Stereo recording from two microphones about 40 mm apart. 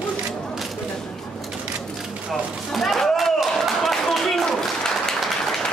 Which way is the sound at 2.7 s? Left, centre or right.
Centre.